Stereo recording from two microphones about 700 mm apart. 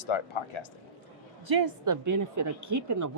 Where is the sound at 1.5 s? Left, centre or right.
Right.